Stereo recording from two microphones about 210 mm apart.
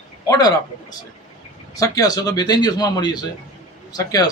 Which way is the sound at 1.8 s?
15° left (ahead or behind).